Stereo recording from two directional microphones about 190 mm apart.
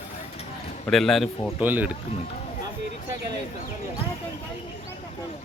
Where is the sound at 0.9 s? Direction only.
Centre (ahead or behind).